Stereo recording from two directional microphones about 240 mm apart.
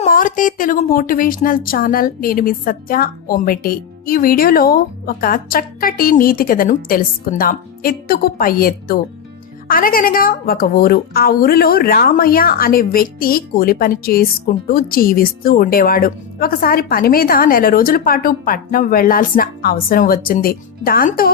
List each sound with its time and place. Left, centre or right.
0.0 s a woman's voice: left